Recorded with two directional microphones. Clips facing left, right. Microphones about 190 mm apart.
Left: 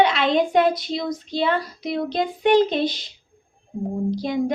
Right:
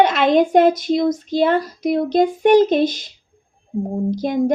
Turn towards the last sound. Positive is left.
turn(degrees=-45)  # may be behind; listen again after turning